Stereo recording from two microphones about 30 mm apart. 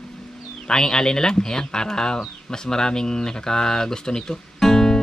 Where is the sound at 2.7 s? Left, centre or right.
Left.